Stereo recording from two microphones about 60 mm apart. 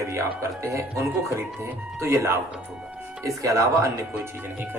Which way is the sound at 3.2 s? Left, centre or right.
Right.